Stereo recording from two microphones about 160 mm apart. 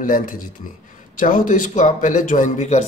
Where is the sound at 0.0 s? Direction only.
55° left (ahead or behind).